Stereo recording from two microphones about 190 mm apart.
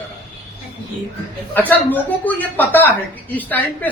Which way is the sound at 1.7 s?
10° left (ahead or behind).